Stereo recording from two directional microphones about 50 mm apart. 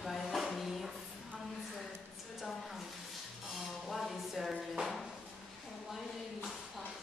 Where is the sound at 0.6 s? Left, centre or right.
Centre.